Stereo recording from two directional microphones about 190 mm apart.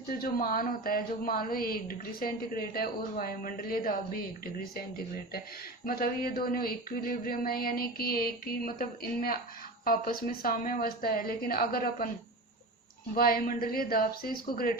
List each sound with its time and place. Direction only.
0.2 s a woman's voice: 50° left (ahead or behind)
5.8 s a woman's voice: 50° left (ahead or behind)
13.1 s a woman's voice: 50° left (ahead or behind)